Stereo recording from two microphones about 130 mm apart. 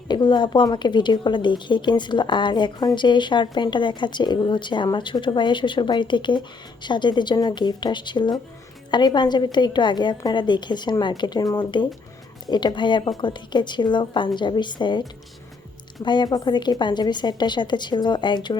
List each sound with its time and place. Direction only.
0.1 s a woman's voice: 35° left (ahead or behind)
16.0 s a woman's voice: 35° left (ahead or behind)